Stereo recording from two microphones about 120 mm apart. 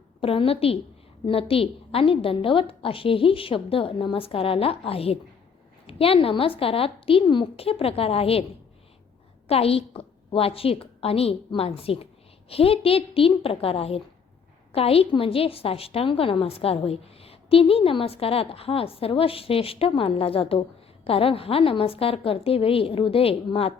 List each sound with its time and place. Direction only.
0.2 s a woman's voice: 50° left (ahead or behind)
9.5 s a woman's voice: 55° left (ahead or behind)